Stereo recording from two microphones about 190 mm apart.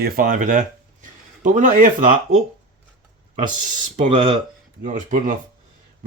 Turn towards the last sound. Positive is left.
turn(degrees=-45)  # may be behind; listen again after turning